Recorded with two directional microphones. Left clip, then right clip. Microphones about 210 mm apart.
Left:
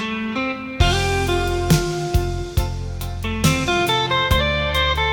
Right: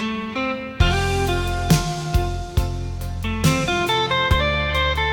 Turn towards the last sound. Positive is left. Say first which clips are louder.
# left 1 dB
turn(degrees=0)  # may be behind; listen again after turning